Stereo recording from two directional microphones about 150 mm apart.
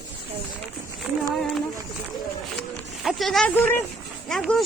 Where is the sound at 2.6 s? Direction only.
Centre (ahead or behind).